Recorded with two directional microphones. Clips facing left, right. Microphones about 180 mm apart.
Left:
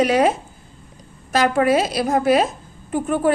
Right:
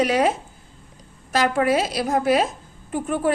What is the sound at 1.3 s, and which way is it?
A woman's voice, 50° left (ahead or behind).